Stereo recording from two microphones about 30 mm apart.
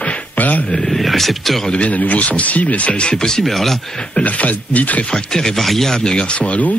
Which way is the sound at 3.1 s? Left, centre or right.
Left.